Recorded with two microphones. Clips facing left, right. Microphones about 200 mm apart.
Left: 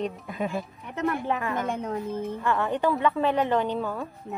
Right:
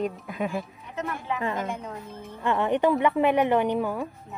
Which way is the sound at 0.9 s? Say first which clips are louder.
Left 4 dB; 55° left (ahead or behind).